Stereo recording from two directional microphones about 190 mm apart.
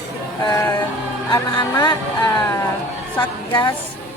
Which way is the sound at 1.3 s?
20° left (ahead or behind).